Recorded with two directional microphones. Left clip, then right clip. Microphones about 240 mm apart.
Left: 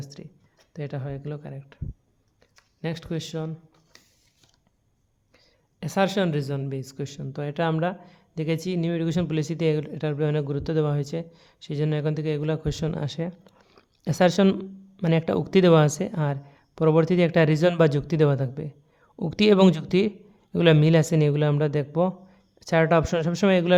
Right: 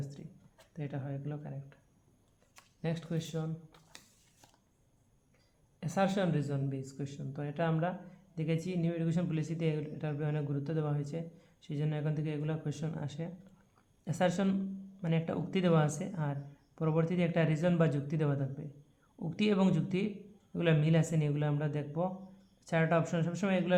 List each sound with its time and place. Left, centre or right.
0.2 s a sound: left
0.7 s speech: left
2.8 s speech: left
5.8 s speech: left